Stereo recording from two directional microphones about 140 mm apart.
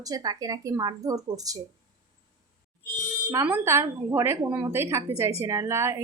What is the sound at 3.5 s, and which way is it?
A woman's voice, 20° right (ahead or behind).